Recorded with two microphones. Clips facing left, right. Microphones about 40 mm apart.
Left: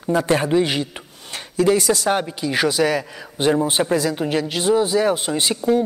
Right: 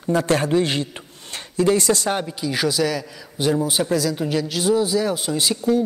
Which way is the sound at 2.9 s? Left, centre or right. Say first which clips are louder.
Left 4 dB; left.